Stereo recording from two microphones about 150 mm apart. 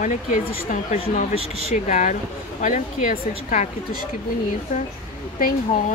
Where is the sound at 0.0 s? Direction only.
55° left (ahead or behind).